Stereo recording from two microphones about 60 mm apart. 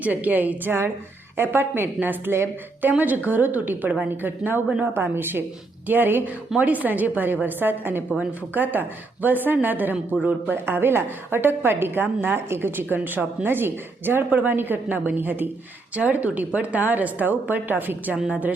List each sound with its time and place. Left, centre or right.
0.0 s a woman's voice: right